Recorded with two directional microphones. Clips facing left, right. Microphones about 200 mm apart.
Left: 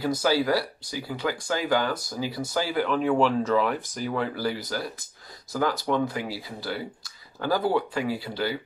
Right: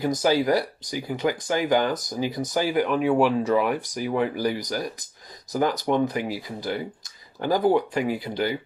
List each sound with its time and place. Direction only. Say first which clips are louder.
0.0 s speech: right 2 dB; 20° right (ahead or behind)